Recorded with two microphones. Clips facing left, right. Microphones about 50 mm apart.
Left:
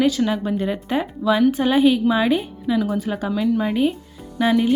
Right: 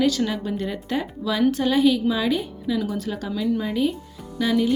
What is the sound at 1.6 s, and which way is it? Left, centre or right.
Speech, left.